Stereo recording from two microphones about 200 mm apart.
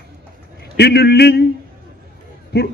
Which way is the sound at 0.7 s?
55° left (ahead or behind).